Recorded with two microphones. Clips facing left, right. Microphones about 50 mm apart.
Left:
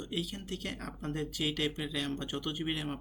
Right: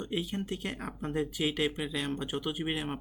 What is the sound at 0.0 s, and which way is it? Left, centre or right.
Speech, right.